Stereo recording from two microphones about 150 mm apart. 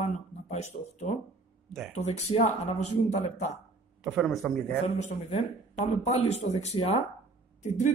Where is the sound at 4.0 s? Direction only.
Centre (ahead or behind).